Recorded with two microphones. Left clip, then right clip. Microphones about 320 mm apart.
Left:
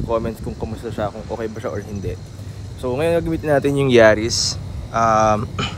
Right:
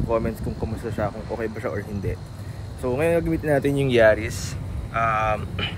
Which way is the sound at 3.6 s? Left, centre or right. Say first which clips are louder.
Left 5 dB; left.